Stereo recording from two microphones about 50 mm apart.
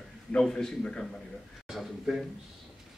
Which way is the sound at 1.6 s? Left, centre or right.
Centre.